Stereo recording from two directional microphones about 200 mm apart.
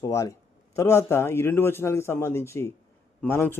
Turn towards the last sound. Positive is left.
turn(degrees=10)  # may be behind; listen again after turning